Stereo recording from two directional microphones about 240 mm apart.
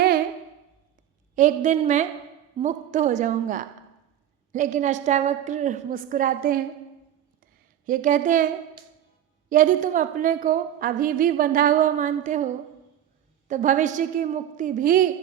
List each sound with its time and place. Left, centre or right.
1.4 s a woman's voice: right
7.9 s a woman's voice: right
9.5 s a woman's voice: right